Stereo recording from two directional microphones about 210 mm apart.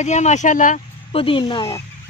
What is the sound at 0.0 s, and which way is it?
Speech, 35° left (ahead or behind).